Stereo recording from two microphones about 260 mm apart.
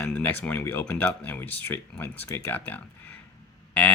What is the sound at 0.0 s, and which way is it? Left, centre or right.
Speech, centre.